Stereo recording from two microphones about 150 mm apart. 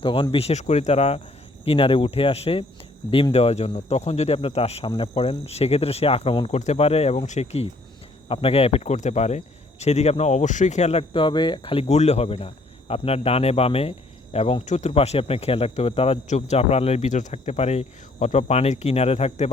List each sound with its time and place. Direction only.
0.0 s speech: 35° left (ahead or behind)